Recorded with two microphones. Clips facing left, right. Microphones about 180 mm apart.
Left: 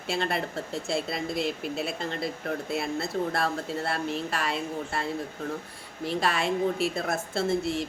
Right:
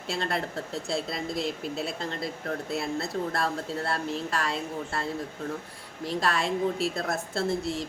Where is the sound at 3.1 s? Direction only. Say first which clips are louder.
Left 1 dB; centre (ahead or behind).